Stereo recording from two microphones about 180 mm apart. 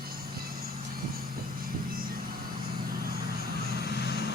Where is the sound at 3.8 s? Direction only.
65° left (ahead or behind).